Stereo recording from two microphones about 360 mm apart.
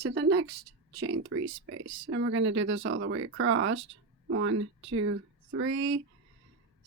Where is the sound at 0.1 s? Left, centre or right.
Right.